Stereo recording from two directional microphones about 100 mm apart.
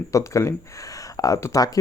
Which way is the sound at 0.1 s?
30° left (ahead or behind).